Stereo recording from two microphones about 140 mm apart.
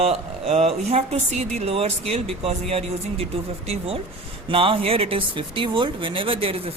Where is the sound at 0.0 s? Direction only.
50° right (ahead or behind).